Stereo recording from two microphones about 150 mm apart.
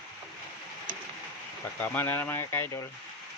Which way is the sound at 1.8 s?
15° left (ahead or behind).